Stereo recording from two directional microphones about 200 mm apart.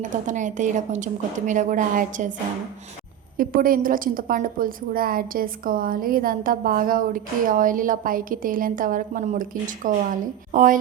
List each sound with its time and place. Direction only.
0.0 s a woman's voice: 40° right (ahead or behind)
3.3 s a woman's voice: 45° right (ahead or behind)